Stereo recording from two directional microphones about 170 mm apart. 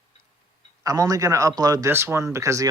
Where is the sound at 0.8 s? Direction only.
20° right (ahead or behind).